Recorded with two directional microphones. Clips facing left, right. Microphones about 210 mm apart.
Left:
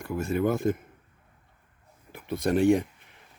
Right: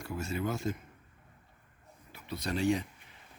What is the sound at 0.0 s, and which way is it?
Speech, 55° left (ahead or behind).